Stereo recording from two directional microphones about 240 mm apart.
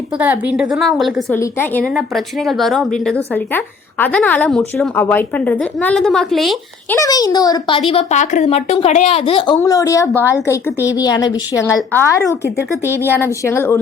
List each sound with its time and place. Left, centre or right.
0.2 s a woman's voice: centre
7.0 s a woman's voice: centre
7.9 s a woman's voice: left
9.6 s a woman's voice: centre